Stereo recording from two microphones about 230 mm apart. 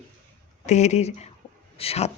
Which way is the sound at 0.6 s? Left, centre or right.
Left.